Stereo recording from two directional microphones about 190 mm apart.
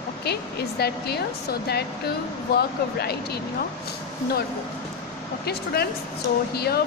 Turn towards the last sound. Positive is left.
turn(degrees=55)  # may be behind; listen again after turning